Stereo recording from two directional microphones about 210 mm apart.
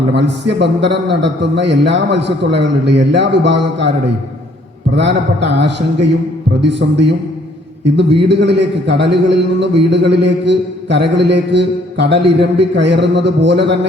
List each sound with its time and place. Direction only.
0.1 s a man's voice: 55° right (ahead or behind)
4.9 s a man's voice: 55° right (ahead or behind)
8.2 s a man's voice: 55° right (ahead or behind)